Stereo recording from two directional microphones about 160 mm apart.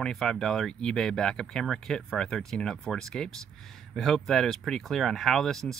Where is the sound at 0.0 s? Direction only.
5° left (ahead or behind).